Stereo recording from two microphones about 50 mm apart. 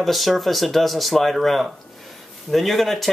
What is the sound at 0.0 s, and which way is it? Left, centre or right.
Speech, centre.